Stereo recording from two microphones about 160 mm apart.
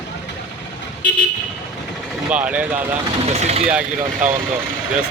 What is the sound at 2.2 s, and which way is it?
Speech, 10° right (ahead or behind).